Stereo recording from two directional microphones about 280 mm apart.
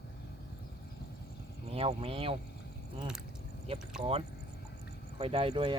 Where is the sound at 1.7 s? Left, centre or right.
Right.